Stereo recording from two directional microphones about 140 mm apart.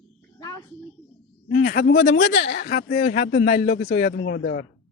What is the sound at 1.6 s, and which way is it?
Speech, 90° left.